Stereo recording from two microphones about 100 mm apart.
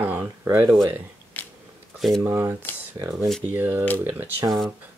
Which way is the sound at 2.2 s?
25° right (ahead or behind).